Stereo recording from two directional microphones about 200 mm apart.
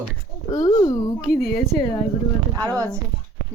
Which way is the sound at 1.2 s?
Centre (ahead or behind).